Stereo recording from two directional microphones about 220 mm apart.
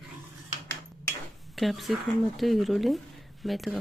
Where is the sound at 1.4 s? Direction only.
Centre (ahead or behind).